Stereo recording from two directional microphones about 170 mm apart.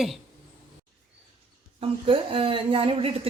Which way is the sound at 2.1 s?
30° right (ahead or behind).